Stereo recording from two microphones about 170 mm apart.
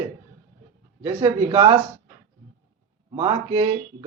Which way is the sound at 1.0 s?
35° right (ahead or behind).